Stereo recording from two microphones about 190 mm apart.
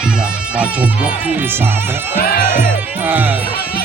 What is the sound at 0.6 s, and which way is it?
Speech, 5° right (ahead or behind).